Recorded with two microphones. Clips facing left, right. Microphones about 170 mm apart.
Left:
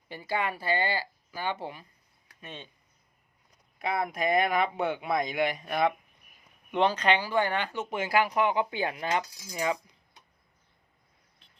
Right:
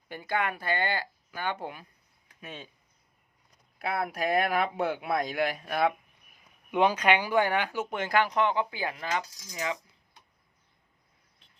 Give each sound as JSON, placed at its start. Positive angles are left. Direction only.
{"t": 0.6, "sound": "speech", "side_deg": 5}
{"t": 3.8, "sound": "speech", "side_deg": -5}
{"t": 7.9, "sound": "speech", "side_deg": 5}
{"t": 8.7, "sound": "speech", "side_deg": 25}
{"t": 9.5, "sound": "a sound", "side_deg": 30}